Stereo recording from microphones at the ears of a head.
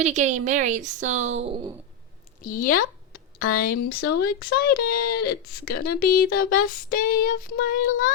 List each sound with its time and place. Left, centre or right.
0.0 s a woman's voice: right
2.4 s a woman's voice: left